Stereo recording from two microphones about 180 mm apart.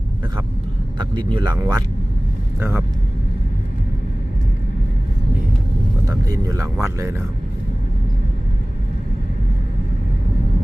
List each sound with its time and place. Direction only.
0.9 s speech: 25° right (ahead or behind)
1.5 s speech: 15° right (ahead or behind)
6.1 s speech: 20° right (ahead or behind)